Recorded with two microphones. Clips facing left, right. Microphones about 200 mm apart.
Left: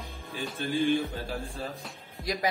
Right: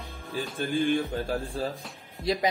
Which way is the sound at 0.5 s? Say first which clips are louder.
Right 1 dB; 50° right (ahead or behind).